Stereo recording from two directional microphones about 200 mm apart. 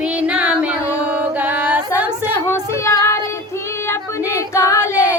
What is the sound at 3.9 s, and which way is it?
Female singing, 15° left (ahead or behind).